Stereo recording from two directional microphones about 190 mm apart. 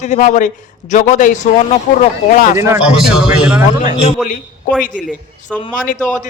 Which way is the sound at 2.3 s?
45° left (ahead or behind).